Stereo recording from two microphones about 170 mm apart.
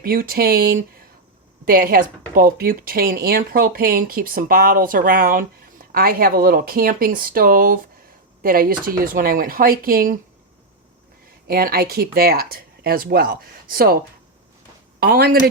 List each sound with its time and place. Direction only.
0.0 s speech: 60° right (ahead or behind)
11.4 s speech: 60° right (ahead or behind)
15.0 s speech: 65° right (ahead or behind)